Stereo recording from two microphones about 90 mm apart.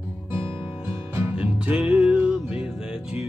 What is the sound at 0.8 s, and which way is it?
Music, 30° right (ahead or behind).